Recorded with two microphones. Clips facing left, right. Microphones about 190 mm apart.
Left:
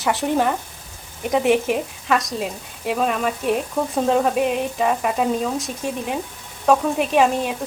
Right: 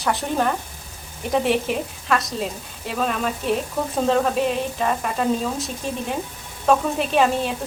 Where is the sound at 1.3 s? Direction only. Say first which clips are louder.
Left 3 dB; centre (ahead or behind).